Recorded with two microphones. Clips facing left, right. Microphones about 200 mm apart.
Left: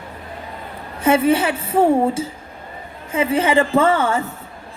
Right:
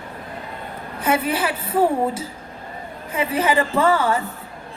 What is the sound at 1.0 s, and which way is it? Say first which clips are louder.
A woman's voice: left 6 dB; 25° left (ahead or behind).